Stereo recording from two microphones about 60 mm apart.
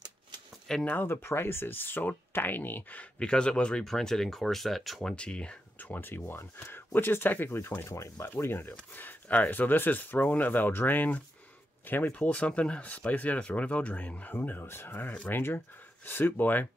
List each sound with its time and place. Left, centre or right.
0.8 s speech: left
3.2 s speech: centre
5.1 s speech: centre
5.8 s speech: left
8.9 s speech: left
12.1 s speech: left